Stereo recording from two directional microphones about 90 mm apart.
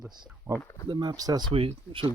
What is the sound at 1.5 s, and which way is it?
Speech, 85° right.